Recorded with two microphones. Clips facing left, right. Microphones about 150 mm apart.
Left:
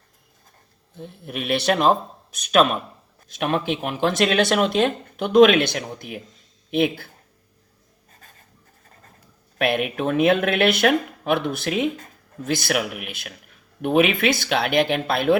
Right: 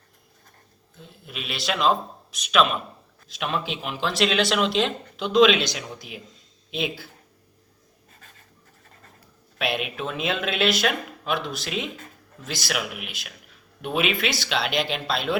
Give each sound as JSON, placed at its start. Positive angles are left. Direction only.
{"t": 0.9, "sound": "speech", "side_deg": 55}
{"t": 9.6, "sound": "speech", "side_deg": 50}